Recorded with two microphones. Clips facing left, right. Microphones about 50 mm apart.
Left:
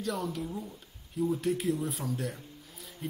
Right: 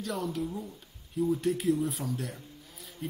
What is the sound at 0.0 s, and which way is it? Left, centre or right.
Speech, centre.